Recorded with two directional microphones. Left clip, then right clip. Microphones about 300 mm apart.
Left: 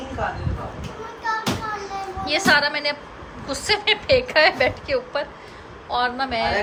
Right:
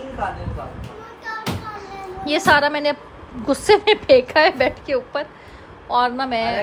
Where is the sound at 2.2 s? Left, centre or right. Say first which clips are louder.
Right 3 dB; centre.